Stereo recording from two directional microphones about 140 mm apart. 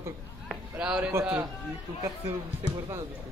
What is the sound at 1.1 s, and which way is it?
Speech, 20° right (ahead or behind).